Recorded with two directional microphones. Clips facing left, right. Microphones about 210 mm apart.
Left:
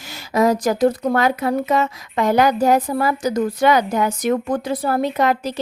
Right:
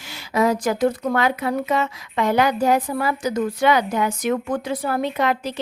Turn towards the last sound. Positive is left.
turn(degrees=40)  # may be behind; listen again after turning